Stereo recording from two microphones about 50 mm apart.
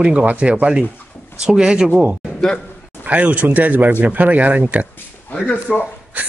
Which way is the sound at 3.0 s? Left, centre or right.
Right.